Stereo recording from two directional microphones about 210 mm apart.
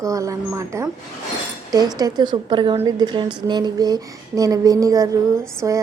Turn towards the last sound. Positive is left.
turn(degrees=-15)  # may be behind; listen again after turning